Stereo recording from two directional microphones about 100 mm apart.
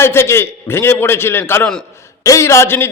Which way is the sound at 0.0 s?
25° left (ahead or behind).